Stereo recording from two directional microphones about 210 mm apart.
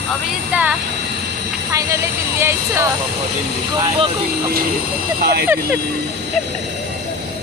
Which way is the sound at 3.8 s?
25° right (ahead or behind).